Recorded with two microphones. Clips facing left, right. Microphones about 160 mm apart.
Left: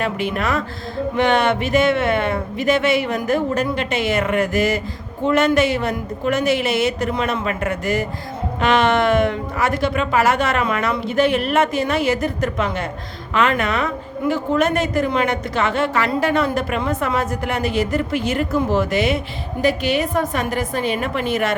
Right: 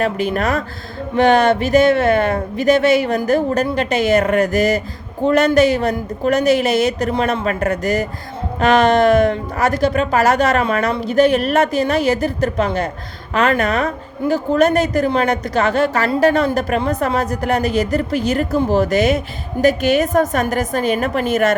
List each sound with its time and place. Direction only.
0.0 s a woman's voice: 40° right (ahead or behind)